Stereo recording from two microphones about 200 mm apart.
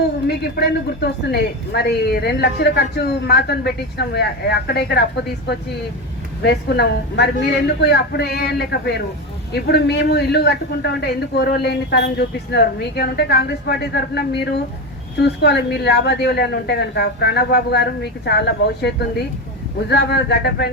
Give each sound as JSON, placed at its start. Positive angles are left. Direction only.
{"t": 0.3, "sound": "speech", "side_deg": 55}
{"t": 6.4, "sound": "a man's voice", "side_deg": 55}